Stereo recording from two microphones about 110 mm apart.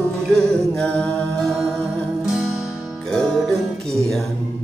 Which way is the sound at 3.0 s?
5° left (ahead or behind).